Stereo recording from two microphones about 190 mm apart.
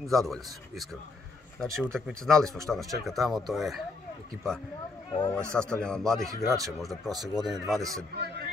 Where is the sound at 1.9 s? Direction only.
5° left (ahead or behind).